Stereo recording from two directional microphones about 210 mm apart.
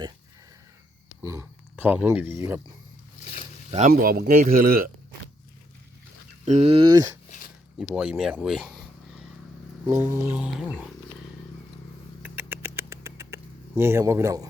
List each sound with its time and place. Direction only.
1.2 s speech: 15° right (ahead or behind)
3.2 s a sound: 35° left (ahead or behind)
3.7 s speech: 30° right (ahead or behind)
3.9 s a man's voice: 45° right (ahead or behind)
6.4 s speech: 30° right (ahead or behind)
7.3 s a sound: 40° left (ahead or behind)
7.8 s speech: 5° right (ahead or behind)
9.8 s speech: 15° right (ahead or behind)
12.2 s rodents: 10° right (ahead or behind)